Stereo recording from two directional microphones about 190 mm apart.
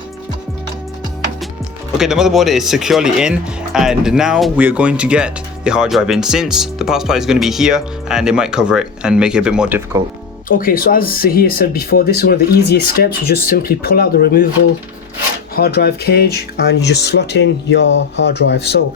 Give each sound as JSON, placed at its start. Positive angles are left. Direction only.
{"t": 1.9, "sound": "speech", "side_deg": -5}
{"t": 10.5, "sound": "speech", "side_deg": 50}
{"t": 15.5, "sound": "speech", "side_deg": 55}